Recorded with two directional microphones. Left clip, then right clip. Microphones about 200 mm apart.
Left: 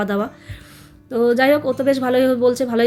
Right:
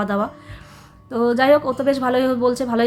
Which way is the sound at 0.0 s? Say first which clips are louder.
Even; centre (ahead or behind).